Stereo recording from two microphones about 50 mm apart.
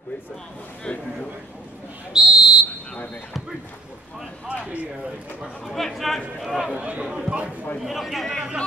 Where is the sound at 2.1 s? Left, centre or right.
Centre.